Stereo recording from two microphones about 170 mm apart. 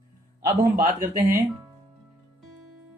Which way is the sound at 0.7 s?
55° right (ahead or behind).